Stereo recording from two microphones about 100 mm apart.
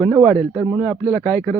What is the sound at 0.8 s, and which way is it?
Speech, 25° left (ahead or behind).